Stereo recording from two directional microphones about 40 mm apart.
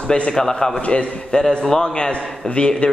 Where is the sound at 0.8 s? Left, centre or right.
Left.